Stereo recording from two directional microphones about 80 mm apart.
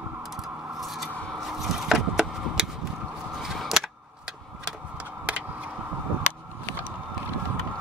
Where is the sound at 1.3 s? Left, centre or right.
Centre.